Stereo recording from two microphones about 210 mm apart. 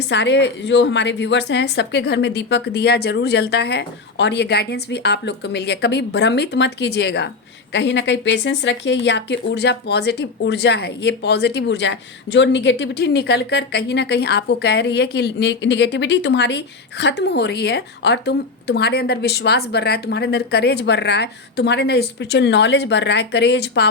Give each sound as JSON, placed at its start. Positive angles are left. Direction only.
{"t": 0.1, "sound": "a woman's voice", "side_deg": 55}